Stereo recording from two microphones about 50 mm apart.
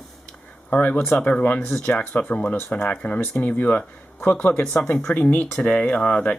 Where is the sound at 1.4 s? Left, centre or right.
Left.